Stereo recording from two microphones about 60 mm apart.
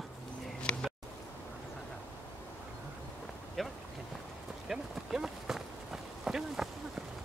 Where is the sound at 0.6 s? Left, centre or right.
Centre.